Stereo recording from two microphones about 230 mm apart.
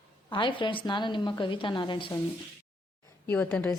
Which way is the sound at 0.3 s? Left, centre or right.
Left.